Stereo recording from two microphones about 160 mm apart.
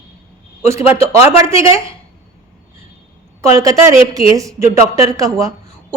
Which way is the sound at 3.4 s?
20° right (ahead or behind).